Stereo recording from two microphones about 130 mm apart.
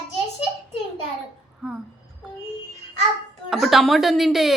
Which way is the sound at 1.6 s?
5° right (ahead or behind).